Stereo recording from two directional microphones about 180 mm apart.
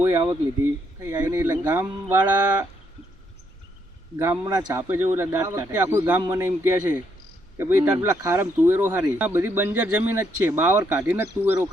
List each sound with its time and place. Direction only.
0.0 s a man's voice: 15° right (ahead or behind)
4.2 s a man's voice: 20° right (ahead or behind)